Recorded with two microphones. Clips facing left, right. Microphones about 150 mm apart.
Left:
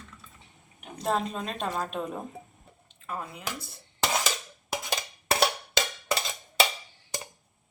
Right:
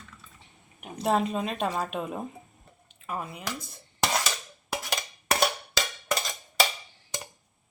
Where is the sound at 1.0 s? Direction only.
5° right (ahead or behind).